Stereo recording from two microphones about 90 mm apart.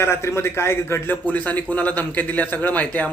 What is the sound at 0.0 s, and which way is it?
A man's voice, 30° left (ahead or behind).